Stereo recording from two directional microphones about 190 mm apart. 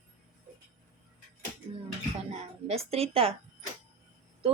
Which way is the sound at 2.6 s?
30° right (ahead or behind).